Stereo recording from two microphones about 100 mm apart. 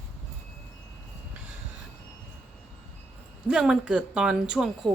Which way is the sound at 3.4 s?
5° right (ahead or behind).